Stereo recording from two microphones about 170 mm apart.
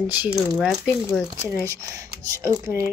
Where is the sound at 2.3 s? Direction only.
15° right (ahead or behind).